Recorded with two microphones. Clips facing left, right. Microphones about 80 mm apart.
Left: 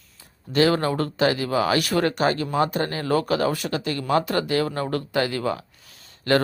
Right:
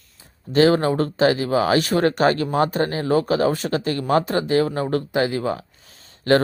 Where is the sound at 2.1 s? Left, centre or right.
Right.